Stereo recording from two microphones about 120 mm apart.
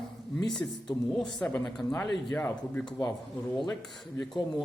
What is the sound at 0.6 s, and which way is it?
Speech, 20° left (ahead or behind).